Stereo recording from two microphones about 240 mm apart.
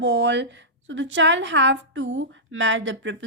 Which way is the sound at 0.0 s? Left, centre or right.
Right.